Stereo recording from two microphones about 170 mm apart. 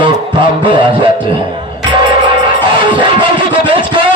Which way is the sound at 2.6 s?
30° right (ahead or behind).